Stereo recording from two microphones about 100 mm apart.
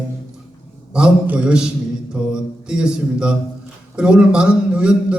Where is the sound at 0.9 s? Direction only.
10° right (ahead or behind).